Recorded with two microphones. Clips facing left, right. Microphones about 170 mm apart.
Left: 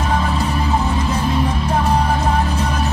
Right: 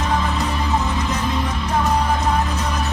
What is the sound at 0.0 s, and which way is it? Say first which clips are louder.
Music: left 2 dB; 30° left (ahead or behind).